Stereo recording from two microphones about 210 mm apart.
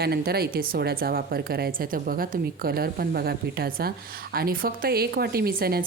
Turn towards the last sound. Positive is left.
turn(degrees=-45)  # may be behind; listen again after turning